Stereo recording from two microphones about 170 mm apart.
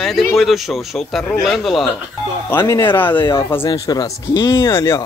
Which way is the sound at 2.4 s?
15° left (ahead or behind).